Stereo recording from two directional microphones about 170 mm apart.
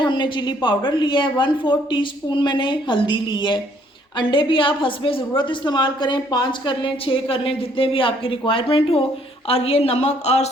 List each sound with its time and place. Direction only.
0.0 s a woman's voice: 25° left (ahead or behind)